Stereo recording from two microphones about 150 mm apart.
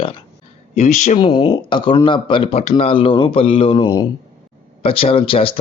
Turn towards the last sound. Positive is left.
turn(degrees=40)  # may be behind; listen again after turning